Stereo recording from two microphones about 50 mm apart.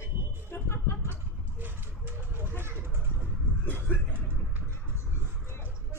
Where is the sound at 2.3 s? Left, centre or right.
Right.